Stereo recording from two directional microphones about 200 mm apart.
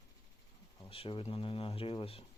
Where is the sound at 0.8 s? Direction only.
25° left (ahead or behind).